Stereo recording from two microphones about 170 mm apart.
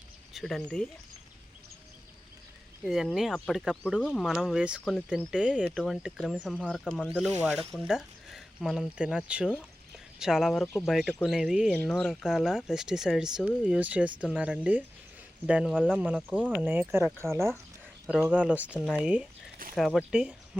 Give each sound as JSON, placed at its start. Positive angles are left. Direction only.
{"t": 0.3, "sound": "speech", "side_deg": 0}
{"t": 2.8, "sound": "speech", "side_deg": -5}
{"t": 7.7, "sound": "speech", "side_deg": -5}